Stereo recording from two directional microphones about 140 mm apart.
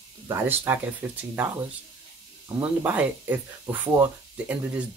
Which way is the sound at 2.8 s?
10° right (ahead or behind).